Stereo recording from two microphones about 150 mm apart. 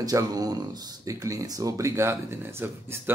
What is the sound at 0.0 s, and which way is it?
Speech, 25° right (ahead or behind).